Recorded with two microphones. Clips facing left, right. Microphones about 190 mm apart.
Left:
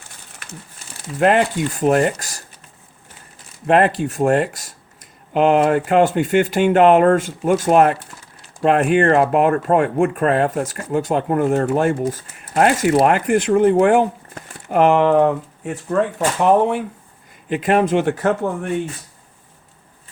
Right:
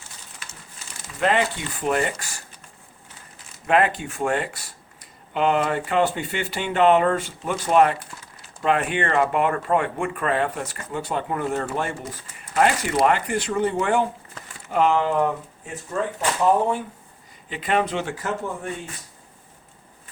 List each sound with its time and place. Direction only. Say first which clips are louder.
1.2 s speech: left 6 dB; 55° left (ahead or behind); by 2.4 s 40° left (ahead or behind)
3.7 s speech: left 5 dB; 40° left (ahead or behind); by 16.8 s 70° left (ahead or behind)
17.5 s speech: left 7 dB; 50° left (ahead or behind)